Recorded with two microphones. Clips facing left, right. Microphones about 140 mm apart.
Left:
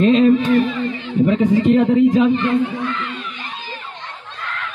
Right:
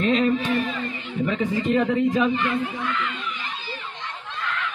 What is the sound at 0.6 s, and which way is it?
Speech, 25° left (ahead or behind).